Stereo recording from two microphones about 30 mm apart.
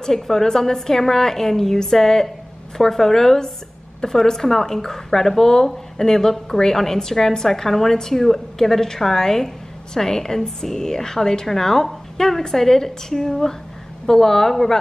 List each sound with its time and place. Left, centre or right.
0.0 s a woman's voice: centre